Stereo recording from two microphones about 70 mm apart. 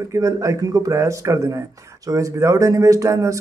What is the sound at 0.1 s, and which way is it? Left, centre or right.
Speech, right.